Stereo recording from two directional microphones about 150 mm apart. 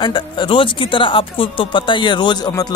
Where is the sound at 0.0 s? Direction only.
30° left (ahead or behind).